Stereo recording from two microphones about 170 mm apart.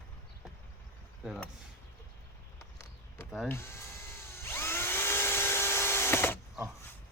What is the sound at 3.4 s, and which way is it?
Dental drill, 15° left (ahead or behind).